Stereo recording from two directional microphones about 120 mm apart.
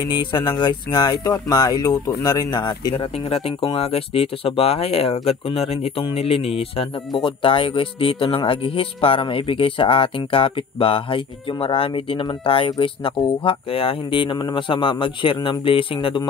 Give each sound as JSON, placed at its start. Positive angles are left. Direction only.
{"t": 0.3, "sound": "speech", "side_deg": 40}
{"t": 3.3, "sound": "speech", "side_deg": 50}